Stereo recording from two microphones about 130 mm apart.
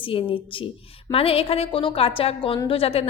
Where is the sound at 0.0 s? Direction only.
45° left (ahead or behind).